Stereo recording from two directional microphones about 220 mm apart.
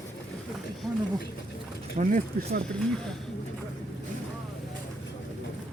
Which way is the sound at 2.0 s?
35° right (ahead or behind).